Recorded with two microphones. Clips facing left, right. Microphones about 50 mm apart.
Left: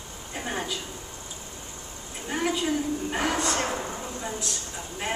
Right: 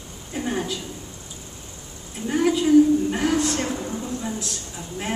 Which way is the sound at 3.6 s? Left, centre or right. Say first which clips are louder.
Right 3 dB; centre.